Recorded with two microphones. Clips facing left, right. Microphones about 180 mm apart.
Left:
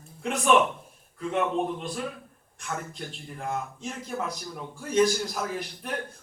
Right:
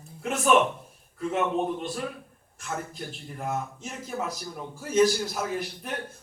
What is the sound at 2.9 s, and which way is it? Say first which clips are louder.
Speech: right 1 dB; 5° right (ahead or behind).